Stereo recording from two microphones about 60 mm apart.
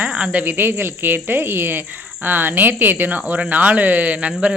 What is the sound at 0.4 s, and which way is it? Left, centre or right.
Speech, right.